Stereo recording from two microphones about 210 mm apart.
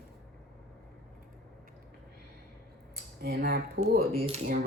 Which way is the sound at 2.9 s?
50° right (ahead or behind).